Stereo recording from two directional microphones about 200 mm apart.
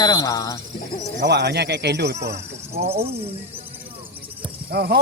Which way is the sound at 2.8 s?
30° right (ahead or behind).